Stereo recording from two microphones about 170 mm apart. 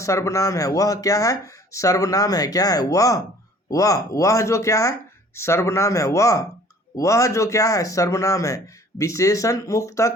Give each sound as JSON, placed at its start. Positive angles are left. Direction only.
{"t": 0.0, "sound": "speech", "side_deg": 15}